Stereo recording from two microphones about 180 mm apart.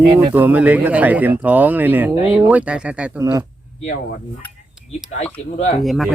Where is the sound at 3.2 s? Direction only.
20° right (ahead or behind).